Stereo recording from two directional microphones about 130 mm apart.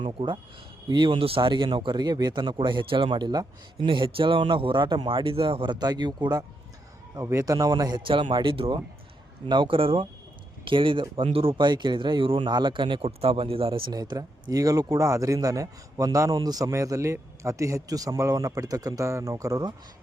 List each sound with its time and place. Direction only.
0.0 s speech: 40° right (ahead or behind)
8.0 s speech: 40° right (ahead or behind)
13.9 s speech: 30° right (ahead or behind)